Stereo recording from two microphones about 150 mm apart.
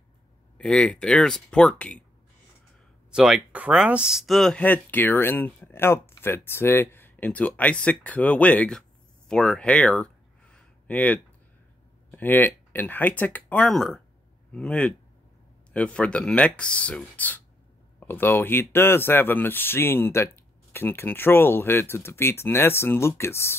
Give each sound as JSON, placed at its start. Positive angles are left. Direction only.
{"t": 0.6, "sound": "speech", "side_deg": 5}
{"t": 3.1, "sound": "speech", "side_deg": -5}
{"t": 9.3, "sound": "a sound", "side_deg": 5}
{"t": 12.1, "sound": "speech", "side_deg": 15}